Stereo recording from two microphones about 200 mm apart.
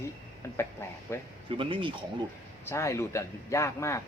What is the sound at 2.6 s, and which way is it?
Speech, 15° left (ahead or behind).